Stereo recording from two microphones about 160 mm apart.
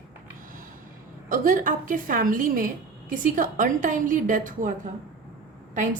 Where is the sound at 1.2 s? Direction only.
60° right (ahead or behind).